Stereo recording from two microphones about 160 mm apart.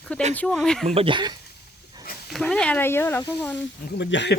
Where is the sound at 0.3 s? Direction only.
5° left (ahead or behind).